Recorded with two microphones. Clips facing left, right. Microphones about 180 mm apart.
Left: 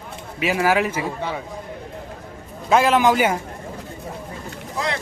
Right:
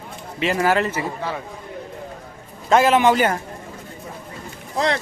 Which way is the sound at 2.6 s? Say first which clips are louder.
Right 1 dB; centre (ahead or behind).